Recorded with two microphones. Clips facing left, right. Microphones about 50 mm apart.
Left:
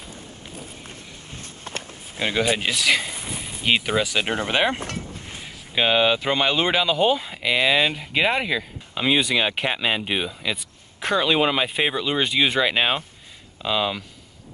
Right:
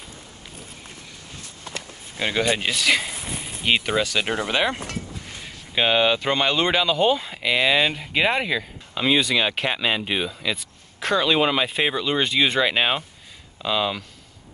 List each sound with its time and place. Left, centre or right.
1.4 s a sound: left
2.1 s speech: centre
4.0 s speech: centre
4.3 s speech: left
5.8 s speech: centre